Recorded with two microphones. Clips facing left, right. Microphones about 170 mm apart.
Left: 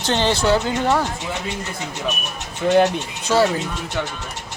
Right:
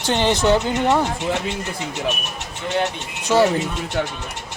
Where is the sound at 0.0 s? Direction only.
15° right (ahead or behind).